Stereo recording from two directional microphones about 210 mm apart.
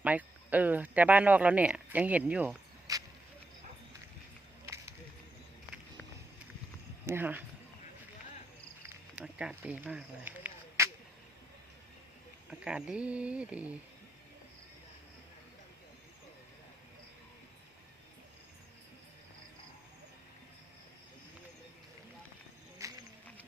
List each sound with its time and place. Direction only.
0.0 s speech: 5° right (ahead or behind)
2.9 s a sound: 15° right (ahead or behind)
7.0 s speech: 10° right (ahead or behind)
8.8 s snake: 10° right (ahead or behind)
12.5 s speech: 5° right (ahead or behind)
22.8 s a sound: 15° right (ahead or behind)